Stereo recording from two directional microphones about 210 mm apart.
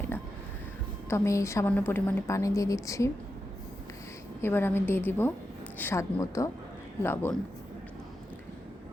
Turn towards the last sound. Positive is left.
turn(degrees=10)  # may be behind; listen again after turning